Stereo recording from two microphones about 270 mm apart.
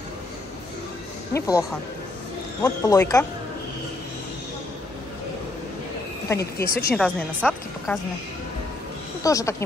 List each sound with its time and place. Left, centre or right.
1.3 s speech: centre
6.2 s speech: centre
9.2 s speech: centre